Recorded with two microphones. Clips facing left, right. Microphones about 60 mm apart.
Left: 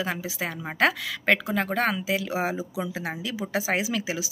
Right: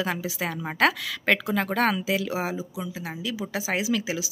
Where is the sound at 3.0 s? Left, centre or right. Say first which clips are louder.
Left 1 dB; left.